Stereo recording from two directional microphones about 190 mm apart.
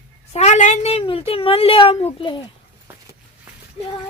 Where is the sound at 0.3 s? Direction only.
35° left (ahead or behind).